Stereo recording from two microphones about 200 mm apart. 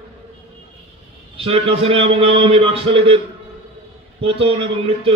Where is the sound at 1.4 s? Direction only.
30° right (ahead or behind).